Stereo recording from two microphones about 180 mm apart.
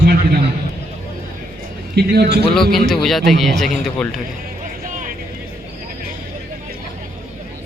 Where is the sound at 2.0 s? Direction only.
65° right (ahead or behind).